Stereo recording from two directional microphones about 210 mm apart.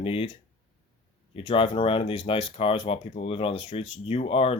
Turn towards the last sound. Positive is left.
turn(degrees=25)  # may be behind; listen again after turning